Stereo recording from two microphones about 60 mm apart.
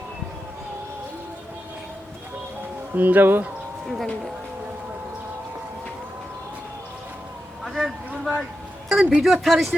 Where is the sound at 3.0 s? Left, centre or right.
Right.